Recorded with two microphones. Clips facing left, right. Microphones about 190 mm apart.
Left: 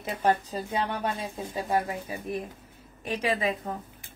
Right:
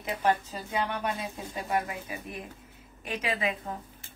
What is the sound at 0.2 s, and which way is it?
A woman's voice, 35° left (ahead or behind).